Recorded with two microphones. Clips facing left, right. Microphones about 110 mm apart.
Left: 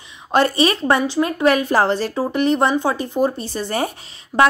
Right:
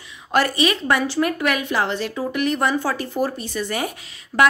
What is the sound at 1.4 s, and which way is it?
A woman's voice, 35° left (ahead or behind).